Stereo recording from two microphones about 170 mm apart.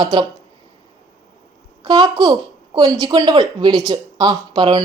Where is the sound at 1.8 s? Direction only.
25° right (ahead or behind).